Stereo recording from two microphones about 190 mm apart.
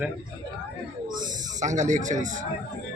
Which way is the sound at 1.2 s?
40° right (ahead or behind).